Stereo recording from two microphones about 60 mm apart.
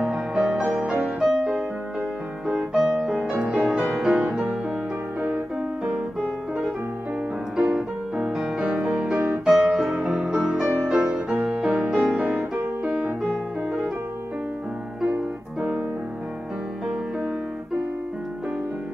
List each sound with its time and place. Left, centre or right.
0.0 s music: centre
5.9 s music: centre
9.2 s music: centre
9.5 s music: centre
13.2 s piano: centre